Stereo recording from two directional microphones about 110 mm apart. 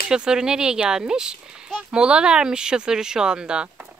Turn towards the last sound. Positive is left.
turn(degrees=-10)  # may be behind; listen again after turning